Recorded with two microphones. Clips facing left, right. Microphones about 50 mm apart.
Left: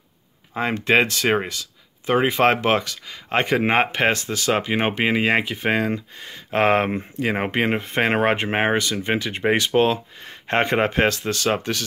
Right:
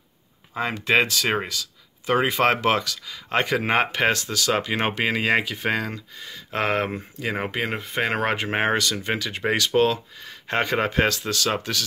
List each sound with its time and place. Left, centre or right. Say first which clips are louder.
0.7 s speech: left 2 dB; left